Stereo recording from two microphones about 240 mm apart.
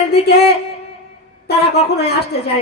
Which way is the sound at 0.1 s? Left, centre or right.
Left.